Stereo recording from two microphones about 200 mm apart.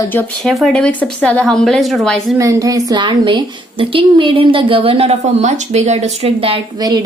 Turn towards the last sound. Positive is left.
turn(degrees=-20)  # may be behind; listen again after turning